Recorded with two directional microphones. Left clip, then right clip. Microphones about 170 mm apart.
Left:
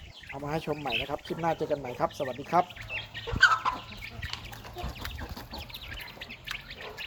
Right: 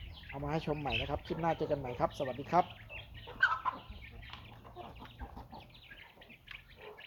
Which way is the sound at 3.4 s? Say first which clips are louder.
Left 9 dB; 40° right (ahead or behind).